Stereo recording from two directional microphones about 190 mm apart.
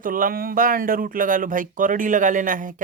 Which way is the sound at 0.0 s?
45° right (ahead or behind).